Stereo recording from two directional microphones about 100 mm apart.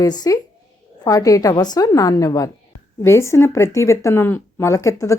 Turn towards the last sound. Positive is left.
turn(degrees=30)  # may be behind; listen again after turning